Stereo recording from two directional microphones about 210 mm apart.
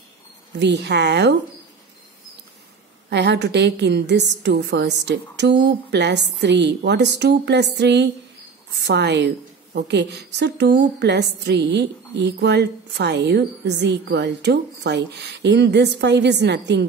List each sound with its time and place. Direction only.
0.6 s a woman's voice: 55° right (ahead or behind)
3.1 s a woman's voice: 55° right (ahead or behind)